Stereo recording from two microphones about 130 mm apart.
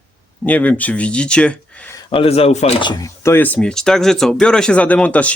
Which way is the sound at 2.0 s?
45° left (ahead or behind).